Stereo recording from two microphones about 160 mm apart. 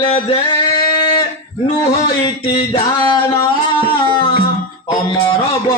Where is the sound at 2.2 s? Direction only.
25° left (ahead or behind).